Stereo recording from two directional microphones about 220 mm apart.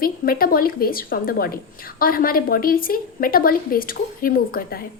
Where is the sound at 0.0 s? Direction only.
40° left (ahead or behind).